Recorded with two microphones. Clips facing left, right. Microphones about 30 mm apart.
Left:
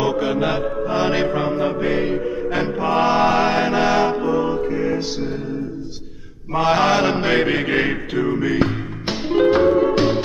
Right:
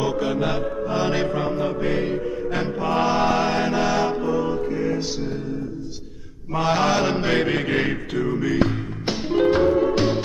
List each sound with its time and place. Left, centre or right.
0.0 s music: centre
6.5 s mantra: centre
7.4 s music: centre